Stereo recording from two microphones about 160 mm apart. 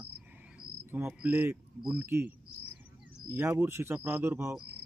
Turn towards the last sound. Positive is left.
turn(degrees=-15)  # may be behind; listen again after turning